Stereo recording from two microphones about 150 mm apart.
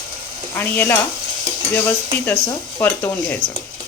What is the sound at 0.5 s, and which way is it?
Speech, 15° left (ahead or behind).